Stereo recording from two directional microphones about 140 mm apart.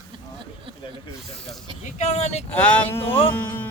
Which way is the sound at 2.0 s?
55° left (ahead or behind).